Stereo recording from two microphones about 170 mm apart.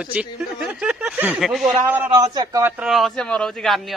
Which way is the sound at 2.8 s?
Centre (ahead or behind).